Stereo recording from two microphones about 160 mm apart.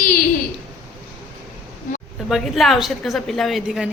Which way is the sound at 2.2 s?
Centre (ahead or behind).